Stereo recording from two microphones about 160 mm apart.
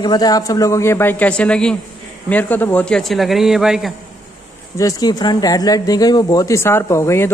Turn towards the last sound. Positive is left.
turn(degrees=15)  # may be behind; listen again after turning